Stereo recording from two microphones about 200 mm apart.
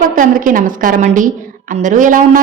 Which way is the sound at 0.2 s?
40° right (ahead or behind).